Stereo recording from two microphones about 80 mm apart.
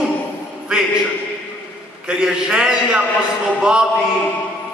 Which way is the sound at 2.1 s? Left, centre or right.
Centre.